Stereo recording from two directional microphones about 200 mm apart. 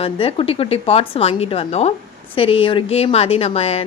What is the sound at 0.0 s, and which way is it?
A woman's voice, 30° left (ahead or behind).